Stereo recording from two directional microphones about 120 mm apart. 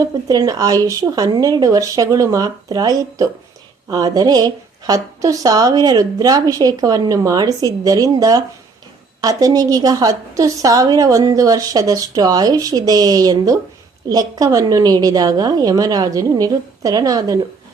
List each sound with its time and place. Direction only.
0.0 s a woman's voice: 30° right (ahead or behind)